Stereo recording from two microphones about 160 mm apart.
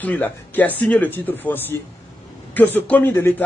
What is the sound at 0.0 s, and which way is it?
Speech, 10° left (ahead or behind).